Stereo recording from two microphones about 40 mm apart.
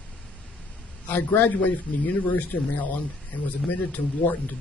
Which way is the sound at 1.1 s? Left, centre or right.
Left.